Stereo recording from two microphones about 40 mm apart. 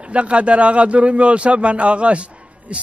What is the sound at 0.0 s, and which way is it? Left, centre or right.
A man's voice, right.